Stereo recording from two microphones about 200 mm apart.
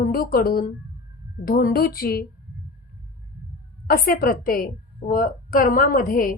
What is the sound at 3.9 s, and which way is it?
A woman's voice, 45° left (ahead or behind).